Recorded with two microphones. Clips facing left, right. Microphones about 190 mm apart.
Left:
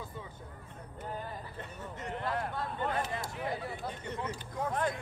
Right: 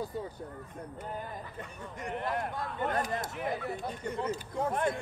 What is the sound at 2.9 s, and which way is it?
Speech, 40° right (ahead or behind).